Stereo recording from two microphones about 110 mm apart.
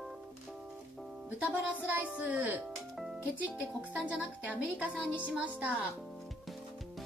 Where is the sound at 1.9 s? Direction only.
15° right (ahead or behind).